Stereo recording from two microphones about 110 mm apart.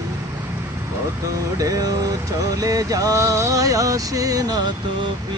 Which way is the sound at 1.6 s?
35° right (ahead or behind).